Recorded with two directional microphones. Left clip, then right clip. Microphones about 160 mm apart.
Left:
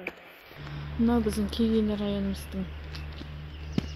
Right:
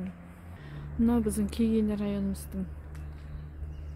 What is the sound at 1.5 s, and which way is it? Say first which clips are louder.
Speech: left 2 dB; 85° right.